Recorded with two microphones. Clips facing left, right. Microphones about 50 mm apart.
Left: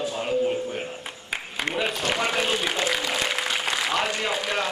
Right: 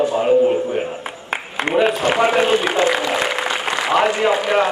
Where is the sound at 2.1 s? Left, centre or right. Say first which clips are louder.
Right 8 dB; centre.